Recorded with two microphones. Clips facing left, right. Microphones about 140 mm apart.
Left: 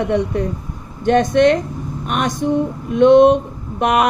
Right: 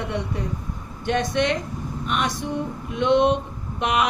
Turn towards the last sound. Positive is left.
turn(degrees=50)  # may be behind; listen again after turning